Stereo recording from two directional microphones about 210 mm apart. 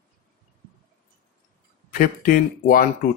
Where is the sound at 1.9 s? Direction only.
40° left (ahead or behind).